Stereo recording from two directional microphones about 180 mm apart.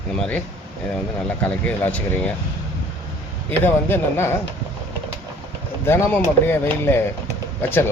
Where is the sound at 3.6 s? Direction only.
10° left (ahead or behind).